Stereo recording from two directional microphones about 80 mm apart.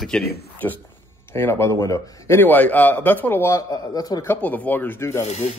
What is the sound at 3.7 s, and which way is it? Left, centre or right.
Speech, left.